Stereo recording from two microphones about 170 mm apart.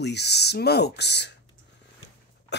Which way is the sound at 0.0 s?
80° left.